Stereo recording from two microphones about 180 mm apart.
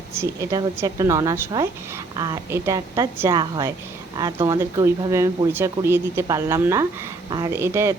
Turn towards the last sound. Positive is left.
turn(degrees=-15)  # may be behind; listen again after turning